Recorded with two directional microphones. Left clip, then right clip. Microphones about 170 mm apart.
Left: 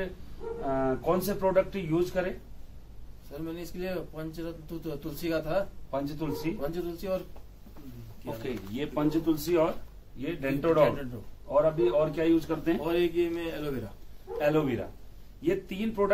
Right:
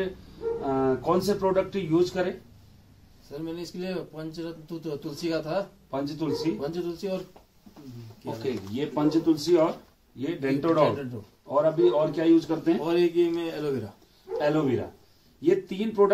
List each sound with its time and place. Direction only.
0.7 s speech: 10° left (ahead or behind)
3.3 s speech: 5° right (ahead or behind)
5.9 s speech: 15° left (ahead or behind)
6.6 s speech: 5° right (ahead or behind)
8.3 s speech: centre (ahead or behind)
12.8 s speech: 10° right (ahead or behind)
14.4 s speech: 15° left (ahead or behind)